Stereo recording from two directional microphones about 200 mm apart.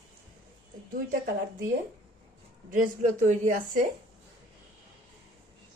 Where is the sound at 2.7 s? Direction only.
40° right (ahead or behind).